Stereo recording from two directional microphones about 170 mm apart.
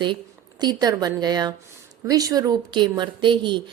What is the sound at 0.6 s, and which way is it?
A woman's voice, 25° right (ahead or behind).